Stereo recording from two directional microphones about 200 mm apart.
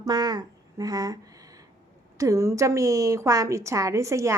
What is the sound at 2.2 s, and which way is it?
A woman's voice, 15° right (ahead or behind).